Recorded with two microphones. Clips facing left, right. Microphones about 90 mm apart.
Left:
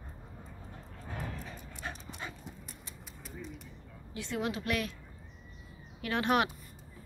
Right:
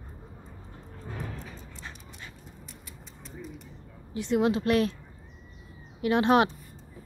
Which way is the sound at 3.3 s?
Centre (ahead or behind).